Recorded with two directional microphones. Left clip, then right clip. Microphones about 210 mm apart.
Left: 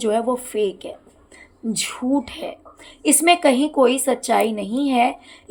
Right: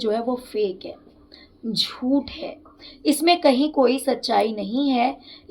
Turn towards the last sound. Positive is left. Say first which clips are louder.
# left 3 dB
turn(degrees=35)  # may be behind; listen again after turning